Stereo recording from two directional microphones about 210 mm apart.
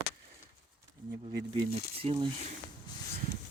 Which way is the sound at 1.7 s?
30° right (ahead or behind).